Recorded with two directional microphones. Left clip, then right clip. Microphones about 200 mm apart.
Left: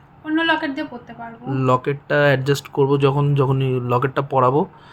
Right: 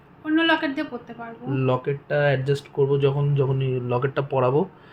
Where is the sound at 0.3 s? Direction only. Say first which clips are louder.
Left 2 dB; 10° left (ahead or behind).